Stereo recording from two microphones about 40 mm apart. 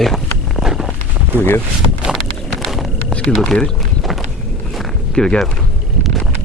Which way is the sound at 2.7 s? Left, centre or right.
Centre.